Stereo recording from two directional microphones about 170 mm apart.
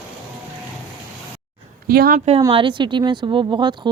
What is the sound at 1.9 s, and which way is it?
Speech, 60° right (ahead or behind).